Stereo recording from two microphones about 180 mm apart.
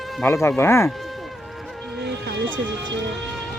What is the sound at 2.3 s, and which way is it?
Music, 90° right.